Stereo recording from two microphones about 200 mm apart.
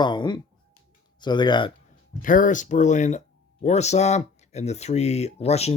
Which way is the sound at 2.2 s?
40° left (ahead or behind).